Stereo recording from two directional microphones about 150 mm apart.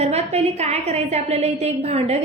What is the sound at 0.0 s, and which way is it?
A woman's voice, 45° right (ahead or behind).